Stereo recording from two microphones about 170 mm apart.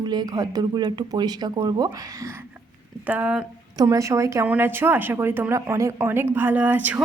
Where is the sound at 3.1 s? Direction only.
10° right (ahead or behind).